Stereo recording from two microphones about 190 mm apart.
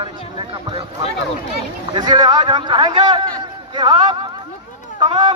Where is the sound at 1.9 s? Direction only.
20° right (ahead or behind).